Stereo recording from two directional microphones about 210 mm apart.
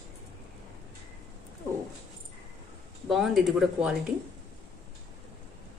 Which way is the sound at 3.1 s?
Centre (ahead or behind).